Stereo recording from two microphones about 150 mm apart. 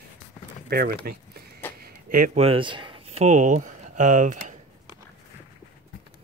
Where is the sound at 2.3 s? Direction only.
40° right (ahead or behind); by 4.5 s 55° right (ahead or behind).